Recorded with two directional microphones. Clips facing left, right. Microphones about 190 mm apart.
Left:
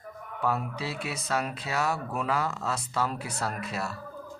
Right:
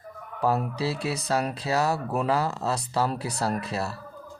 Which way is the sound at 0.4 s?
35° right (ahead or behind).